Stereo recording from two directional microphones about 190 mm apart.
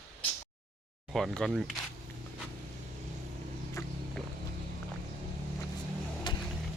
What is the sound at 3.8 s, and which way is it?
Music, 15° left (ahead or behind).